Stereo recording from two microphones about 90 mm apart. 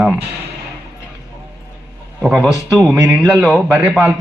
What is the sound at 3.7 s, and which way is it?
Speech, 15° right (ahead or behind).